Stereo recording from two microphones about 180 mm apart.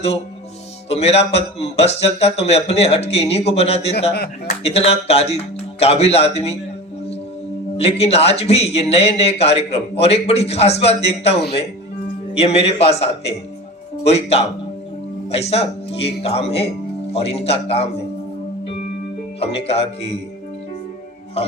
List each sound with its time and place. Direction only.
0.9 s a man's voice: 35° left (ahead or behind)
7.8 s a man's voice: 35° left (ahead or behind)
19.4 s a man's voice: 35° left (ahead or behind)